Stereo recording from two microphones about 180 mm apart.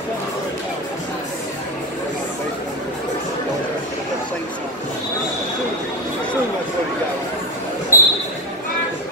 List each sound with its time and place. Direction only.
7.9 s basketball bounce: 15° left (ahead or behind)